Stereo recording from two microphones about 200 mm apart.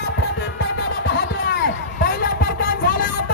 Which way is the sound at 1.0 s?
55° left (ahead or behind).